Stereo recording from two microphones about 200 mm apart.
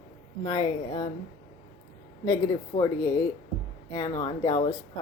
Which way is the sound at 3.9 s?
20° left (ahead or behind).